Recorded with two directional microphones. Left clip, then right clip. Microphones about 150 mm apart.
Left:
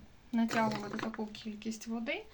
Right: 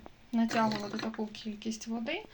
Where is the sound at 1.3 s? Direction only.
35° right (ahead or behind).